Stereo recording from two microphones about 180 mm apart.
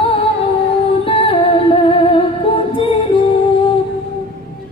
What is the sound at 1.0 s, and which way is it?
Music, 30° left (ahead or behind).